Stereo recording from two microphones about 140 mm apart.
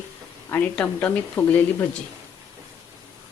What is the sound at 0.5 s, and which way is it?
Speech, 15° left (ahead or behind).